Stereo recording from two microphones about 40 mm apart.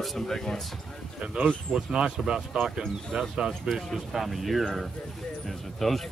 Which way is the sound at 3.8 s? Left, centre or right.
Centre.